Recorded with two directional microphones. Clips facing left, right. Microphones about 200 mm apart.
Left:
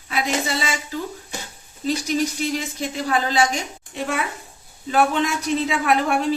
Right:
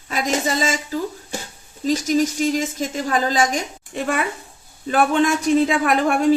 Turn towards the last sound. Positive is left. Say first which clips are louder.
# right 3 dB
turn(degrees=-50)  # may be behind; listen again after turning